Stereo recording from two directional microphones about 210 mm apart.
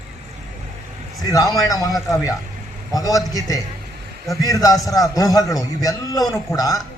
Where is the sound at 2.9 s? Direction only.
15° left (ahead or behind).